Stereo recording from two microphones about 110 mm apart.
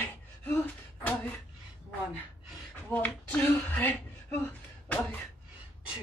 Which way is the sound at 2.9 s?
15° left (ahead or behind).